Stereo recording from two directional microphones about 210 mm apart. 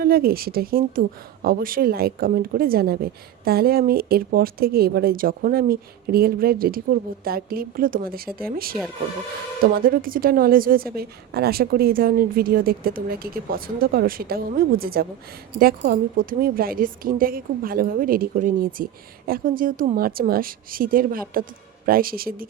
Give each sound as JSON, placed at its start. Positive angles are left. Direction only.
{"t": 0.0, "sound": "speech", "side_deg": -45}